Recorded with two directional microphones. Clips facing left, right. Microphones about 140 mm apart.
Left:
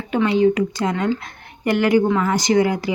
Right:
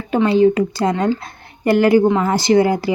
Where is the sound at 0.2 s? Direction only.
35° right (ahead or behind).